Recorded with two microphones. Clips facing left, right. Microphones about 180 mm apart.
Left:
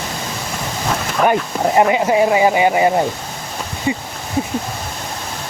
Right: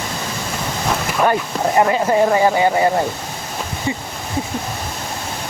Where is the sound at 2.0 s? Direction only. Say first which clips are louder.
Left 1 dB; 10° left (ahead or behind).